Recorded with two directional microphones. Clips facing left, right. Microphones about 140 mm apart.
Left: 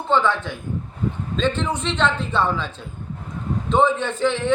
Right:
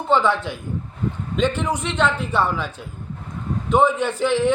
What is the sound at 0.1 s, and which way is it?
A man's voice, 15° right (ahead or behind).